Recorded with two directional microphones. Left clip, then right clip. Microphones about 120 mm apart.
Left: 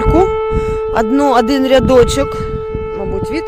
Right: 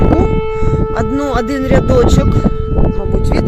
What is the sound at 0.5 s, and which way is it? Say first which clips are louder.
Speech: left 2 dB; 25° left (ahead or behind).